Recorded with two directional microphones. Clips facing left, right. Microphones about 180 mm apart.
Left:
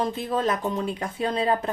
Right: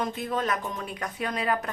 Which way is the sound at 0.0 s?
30° left (ahead or behind).